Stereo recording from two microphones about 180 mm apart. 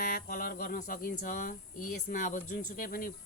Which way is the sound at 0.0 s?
55° left (ahead or behind).